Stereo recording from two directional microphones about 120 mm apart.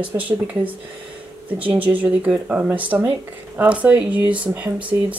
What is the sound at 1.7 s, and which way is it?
Speech, 15° right (ahead or behind).